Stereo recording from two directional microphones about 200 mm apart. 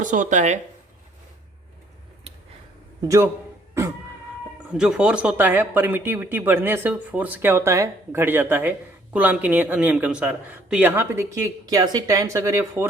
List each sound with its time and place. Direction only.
0.0 s speech: 40° right (ahead or behind)
4.8 s speech: 5° right (ahead or behind)